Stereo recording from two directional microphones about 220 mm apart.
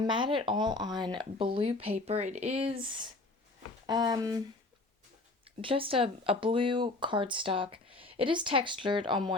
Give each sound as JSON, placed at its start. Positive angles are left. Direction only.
{"t": 0.0, "sound": "speech", "side_deg": -20}
{"t": 5.5, "sound": "speech", "side_deg": -25}